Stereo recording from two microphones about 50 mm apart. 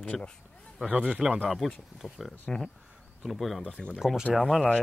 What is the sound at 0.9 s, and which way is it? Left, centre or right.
Speech, right.